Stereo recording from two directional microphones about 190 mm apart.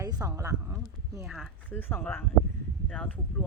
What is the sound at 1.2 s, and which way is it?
Speech, centre (ahead or behind).